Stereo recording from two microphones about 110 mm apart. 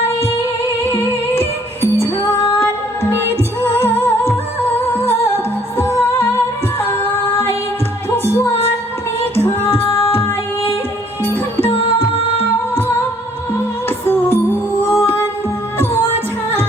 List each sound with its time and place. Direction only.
1.4 s music: 20° left (ahead or behind)
3.6 s music: 20° left (ahead or behind)
5.7 s music: 20° left (ahead or behind)
8.1 s music: 20° left (ahead or behind)
11.2 s music: 20° left (ahead or behind)
14.0 s music: 20° left (ahead or behind)